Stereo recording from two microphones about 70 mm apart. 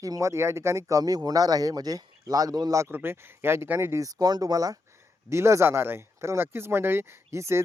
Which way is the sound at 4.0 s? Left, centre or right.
Right.